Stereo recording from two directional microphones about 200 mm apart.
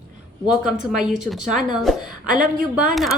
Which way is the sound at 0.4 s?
5° right (ahead or behind).